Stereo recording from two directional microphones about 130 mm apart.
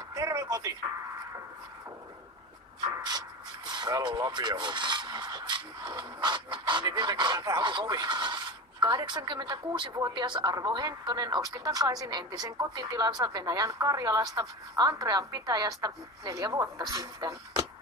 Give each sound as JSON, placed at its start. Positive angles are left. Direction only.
{"t": 0.1, "sound": "music", "side_deg": -25}
{"t": 3.1, "sound": "speech", "side_deg": -35}